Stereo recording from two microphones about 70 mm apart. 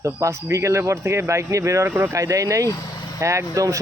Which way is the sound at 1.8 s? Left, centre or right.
Right.